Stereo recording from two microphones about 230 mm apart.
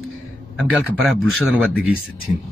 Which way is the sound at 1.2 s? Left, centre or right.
Centre.